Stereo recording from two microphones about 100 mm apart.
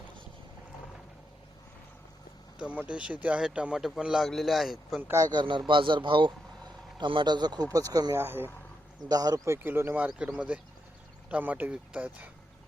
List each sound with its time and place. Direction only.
2.6 s a man's voice: 10° right (ahead or behind)
5.3 s speech: 50° right (ahead or behind)
8.2 s speech: 20° right (ahead or behind)
9.0 s speech: 40° right (ahead or behind)
9.6 s a man's voice: 20° right (ahead or behind)